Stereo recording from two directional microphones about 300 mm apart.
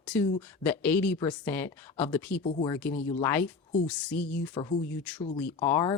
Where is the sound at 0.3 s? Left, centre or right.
Centre.